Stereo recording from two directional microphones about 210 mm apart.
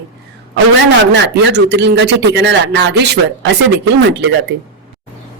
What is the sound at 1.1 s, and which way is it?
Speech, 55° right (ahead or behind).